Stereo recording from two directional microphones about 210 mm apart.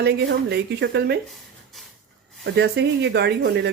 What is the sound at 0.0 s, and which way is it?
Speech, 50° right (ahead or behind).